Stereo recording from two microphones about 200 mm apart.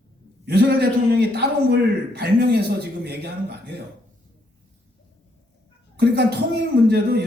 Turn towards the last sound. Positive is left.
turn(degrees=-50)  # may be behind; listen again after turning